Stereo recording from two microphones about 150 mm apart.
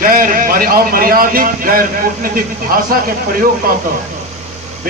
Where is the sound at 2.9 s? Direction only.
75° right (ahead or behind).